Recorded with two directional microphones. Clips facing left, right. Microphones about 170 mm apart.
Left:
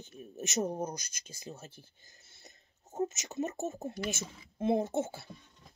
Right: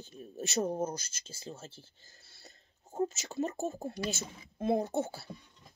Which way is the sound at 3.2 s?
20° left (ahead or behind).